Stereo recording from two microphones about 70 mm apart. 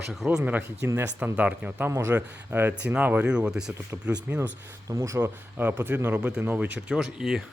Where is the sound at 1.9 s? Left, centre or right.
Right; by 4.4 s centre.